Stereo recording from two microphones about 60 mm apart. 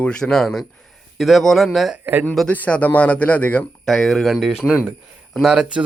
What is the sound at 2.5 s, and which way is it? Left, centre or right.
Speech, left.